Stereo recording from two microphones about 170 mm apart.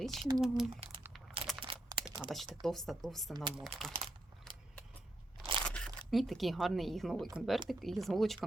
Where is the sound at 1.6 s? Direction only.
30° right (ahead or behind).